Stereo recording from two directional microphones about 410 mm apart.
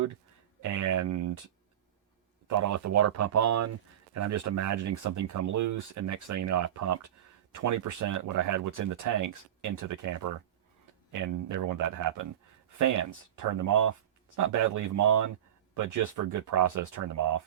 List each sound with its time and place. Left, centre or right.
0.6 s speech: right
2.5 s speech: right